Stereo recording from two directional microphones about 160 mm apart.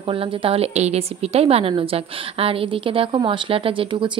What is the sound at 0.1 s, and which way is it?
A woman's voice, 35° right (ahead or behind).